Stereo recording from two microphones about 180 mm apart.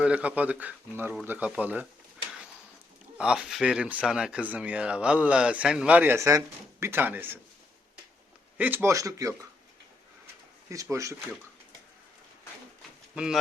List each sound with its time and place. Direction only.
0.0 s speech: 5° right (ahead or behind)
3.2 s speech: 5° right (ahead or behind)
8.5 s speech: 10° right (ahead or behind)
10.7 s speech: 15° right (ahead or behind)
13.1 s speech: 5° right (ahead or behind)